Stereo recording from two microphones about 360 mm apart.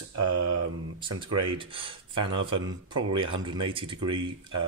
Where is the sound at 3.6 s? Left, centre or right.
Centre.